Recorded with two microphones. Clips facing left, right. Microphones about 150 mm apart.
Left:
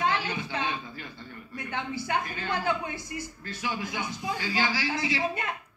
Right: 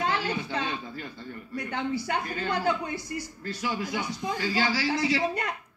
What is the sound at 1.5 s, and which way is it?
A woman's voice, 35° right (ahead or behind).